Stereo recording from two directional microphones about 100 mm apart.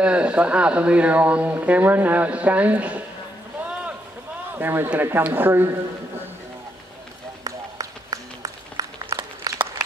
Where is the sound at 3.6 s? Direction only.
15° right (ahead or behind).